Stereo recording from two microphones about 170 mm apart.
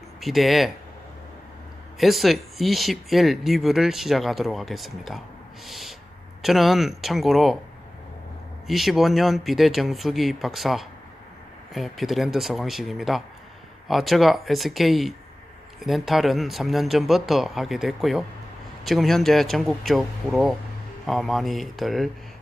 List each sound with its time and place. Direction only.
0.2 s speech: centre (ahead or behind)
2.0 s speech: centre (ahead or behind)
8.6 s speech: centre (ahead or behind)